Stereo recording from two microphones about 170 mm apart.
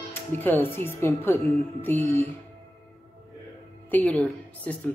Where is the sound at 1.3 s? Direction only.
Centre (ahead or behind).